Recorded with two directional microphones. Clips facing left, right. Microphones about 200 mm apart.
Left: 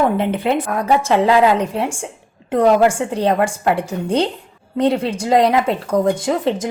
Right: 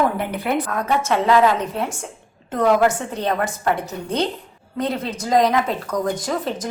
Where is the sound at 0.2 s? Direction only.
25° left (ahead or behind).